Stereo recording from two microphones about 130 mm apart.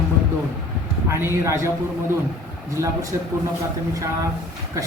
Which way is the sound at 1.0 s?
20° right (ahead or behind).